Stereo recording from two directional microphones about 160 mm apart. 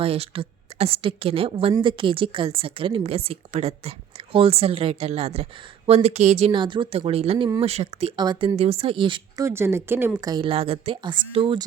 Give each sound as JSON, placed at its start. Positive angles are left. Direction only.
{"t": 0.0, "sound": "a woman's voice", "side_deg": -35}
{"t": 9.4, "sound": "a woman's voice", "side_deg": -15}